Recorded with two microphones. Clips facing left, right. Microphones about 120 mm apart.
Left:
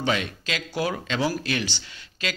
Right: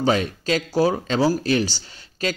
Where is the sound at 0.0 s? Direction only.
40° right (ahead or behind).